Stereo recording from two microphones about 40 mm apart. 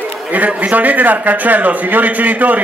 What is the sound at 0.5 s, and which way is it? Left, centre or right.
A man's voice, right.